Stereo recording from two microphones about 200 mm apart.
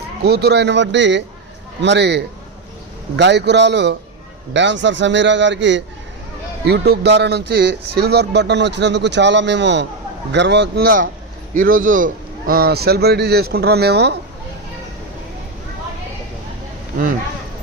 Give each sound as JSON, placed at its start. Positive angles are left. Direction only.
{"t": 0.3, "sound": "a man's voice", "side_deg": -55}